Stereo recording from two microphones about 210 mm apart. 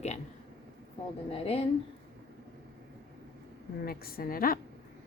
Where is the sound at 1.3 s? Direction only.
30° left (ahead or behind).